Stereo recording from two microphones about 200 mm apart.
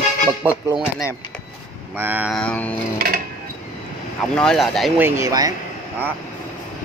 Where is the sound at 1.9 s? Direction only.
10° right (ahead or behind).